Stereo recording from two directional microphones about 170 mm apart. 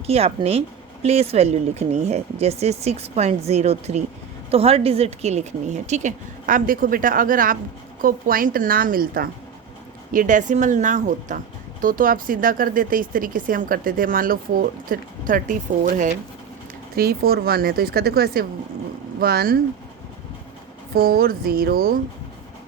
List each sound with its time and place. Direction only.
0.1 s a woman's voice: 35° right (ahead or behind)
16.9 s a woman's voice: 65° right (ahead or behind)
20.9 s a woman's voice: 60° right (ahead or behind)